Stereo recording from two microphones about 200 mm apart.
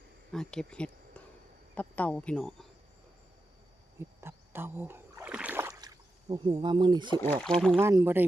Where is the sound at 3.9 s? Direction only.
10° right (ahead or behind).